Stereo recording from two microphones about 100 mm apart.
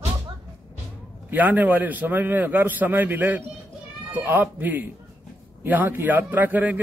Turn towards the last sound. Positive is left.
turn(degrees=-15)  # may be behind; listen again after turning